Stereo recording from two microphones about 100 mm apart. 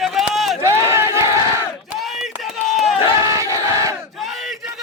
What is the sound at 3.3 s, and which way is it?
Battle cry, 30° right (ahead or behind).